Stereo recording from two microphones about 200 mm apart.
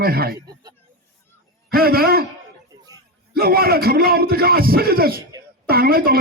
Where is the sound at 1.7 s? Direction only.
50° right (ahead or behind).